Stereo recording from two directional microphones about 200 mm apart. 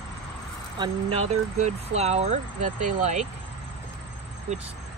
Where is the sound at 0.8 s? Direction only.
30° right (ahead or behind).